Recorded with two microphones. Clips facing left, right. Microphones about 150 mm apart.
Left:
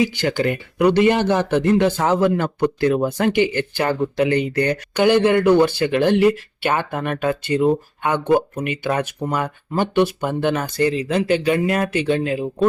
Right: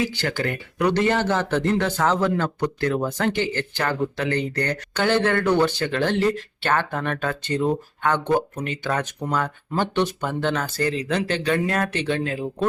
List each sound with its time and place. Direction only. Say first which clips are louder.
0.0 s speech: left 6 dB; 15° left (ahead or behind)